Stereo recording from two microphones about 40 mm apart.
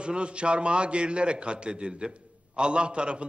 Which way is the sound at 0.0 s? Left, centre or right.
Right.